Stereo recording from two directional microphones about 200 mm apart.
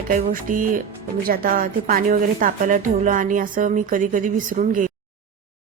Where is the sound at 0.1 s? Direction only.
45° right (ahead or behind).